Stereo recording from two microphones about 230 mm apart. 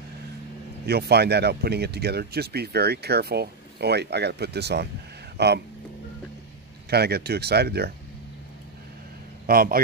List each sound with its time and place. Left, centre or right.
0.8 s speech: right
6.9 s speech: right
9.5 s speech: right